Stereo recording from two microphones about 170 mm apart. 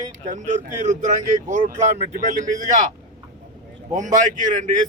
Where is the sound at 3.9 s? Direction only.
45° right (ahead or behind).